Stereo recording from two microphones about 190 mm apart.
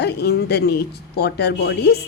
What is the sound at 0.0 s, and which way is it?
Speech, 60° left (ahead or behind).